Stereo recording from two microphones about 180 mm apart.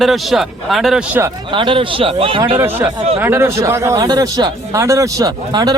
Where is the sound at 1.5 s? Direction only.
25° right (ahead or behind).